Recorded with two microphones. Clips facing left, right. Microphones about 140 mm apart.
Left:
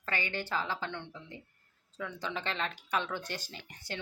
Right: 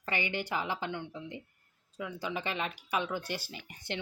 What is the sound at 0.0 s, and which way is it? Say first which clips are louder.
Speech: right 2 dB; 15° right (ahead or behind).